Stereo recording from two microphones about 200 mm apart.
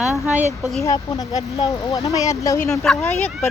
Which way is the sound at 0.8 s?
15° left (ahead or behind).